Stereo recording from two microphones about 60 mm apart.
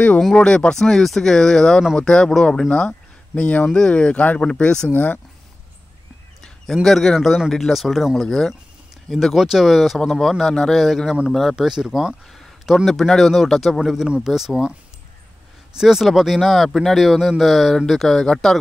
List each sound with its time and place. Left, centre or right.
0.4 s speech: centre
4.9 s speech: left
6.4 s speech: centre
11.5 s speech: centre
12.3 s speech: centre
15.7 s speech: centre